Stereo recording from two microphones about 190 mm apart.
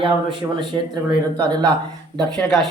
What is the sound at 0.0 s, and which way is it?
Speech, 25° right (ahead or behind).